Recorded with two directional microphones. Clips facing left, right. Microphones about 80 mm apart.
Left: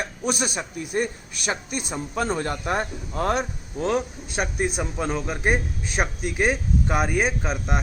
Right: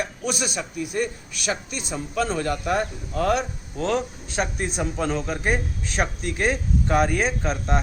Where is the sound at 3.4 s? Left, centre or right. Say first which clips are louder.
Left 1 dB; centre.